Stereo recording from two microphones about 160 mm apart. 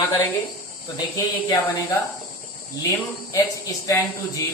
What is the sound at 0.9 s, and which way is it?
Speech, 25° left (ahead or behind).